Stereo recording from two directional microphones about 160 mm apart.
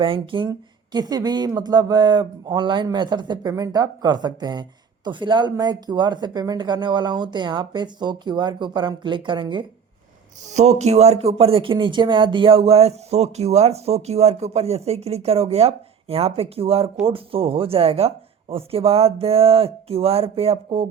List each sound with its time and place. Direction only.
0.0 s speech: 30° right (ahead or behind)
10.5 s speech: 45° right (ahead or behind)